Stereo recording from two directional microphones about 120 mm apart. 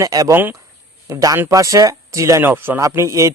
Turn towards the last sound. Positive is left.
turn(degrees=-25)  # may be behind; listen again after turning